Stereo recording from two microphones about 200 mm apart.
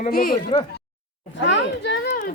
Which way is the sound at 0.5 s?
30° left (ahead or behind).